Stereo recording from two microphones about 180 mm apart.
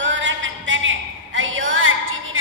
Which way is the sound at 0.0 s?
90° right.